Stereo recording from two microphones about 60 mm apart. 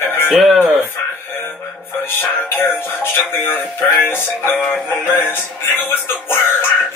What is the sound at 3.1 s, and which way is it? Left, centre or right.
Speech, left.